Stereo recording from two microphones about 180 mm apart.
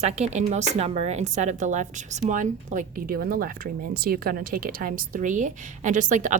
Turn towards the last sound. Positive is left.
turn(degrees=-45)  # may be behind; listen again after turning